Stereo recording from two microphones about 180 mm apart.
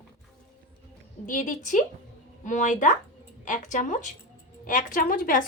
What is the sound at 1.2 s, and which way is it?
A woman's voice, 45° left (ahead or behind).